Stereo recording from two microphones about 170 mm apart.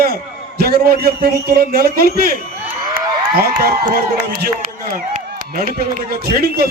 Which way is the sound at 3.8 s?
65° right (ahead or behind).